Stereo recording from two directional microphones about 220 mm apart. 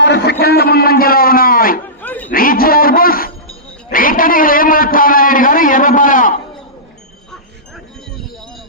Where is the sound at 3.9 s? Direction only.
40° left (ahead or behind).